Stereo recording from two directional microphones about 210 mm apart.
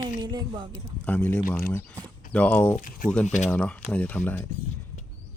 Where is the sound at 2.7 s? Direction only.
40° left (ahead or behind).